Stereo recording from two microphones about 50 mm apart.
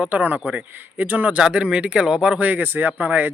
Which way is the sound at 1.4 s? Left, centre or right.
Centre.